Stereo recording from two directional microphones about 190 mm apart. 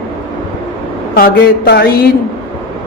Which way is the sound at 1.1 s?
55° left (ahead or behind).